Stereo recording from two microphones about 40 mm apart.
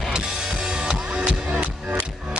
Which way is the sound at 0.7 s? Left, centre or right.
Right.